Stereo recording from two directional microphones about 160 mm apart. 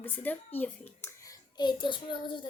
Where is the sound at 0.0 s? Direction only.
10° left (ahead or behind).